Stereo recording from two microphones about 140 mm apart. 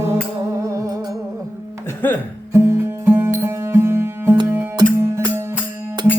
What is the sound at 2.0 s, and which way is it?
Music, 15° left (ahead or behind).